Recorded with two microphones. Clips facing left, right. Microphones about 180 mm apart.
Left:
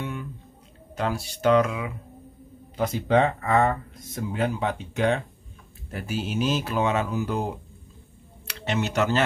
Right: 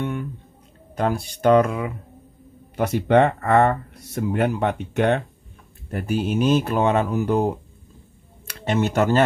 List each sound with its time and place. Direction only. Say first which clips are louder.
0.0 s guitar: right 6 dB; 55° right (ahead or behind)
0.9 s speech: right 5 dB; 55° right (ahead or behind)
2.7 s speech: right 4 dB; 65° right (ahead or behind); by 9.2 s 50° right (ahead or behind)